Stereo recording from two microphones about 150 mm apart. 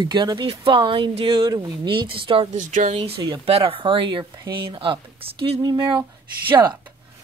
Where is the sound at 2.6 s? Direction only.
55° right (ahead or behind).